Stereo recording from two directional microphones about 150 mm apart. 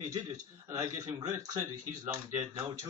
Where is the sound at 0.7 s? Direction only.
20° right (ahead or behind).